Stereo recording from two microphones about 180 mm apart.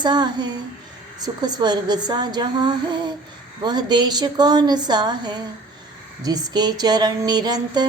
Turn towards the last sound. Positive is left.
turn(degrees=-25)  # may be behind; listen again after turning